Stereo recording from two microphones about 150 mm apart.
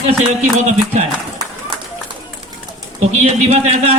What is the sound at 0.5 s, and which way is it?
Speech, 50° right (ahead or behind).